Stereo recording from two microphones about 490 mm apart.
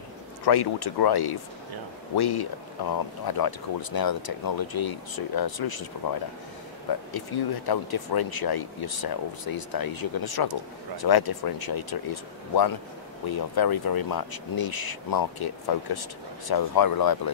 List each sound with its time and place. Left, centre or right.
0.5 s speech: left
7.1 s speech: left